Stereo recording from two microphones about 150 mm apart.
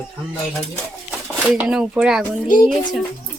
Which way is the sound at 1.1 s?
Centre (ahead or behind).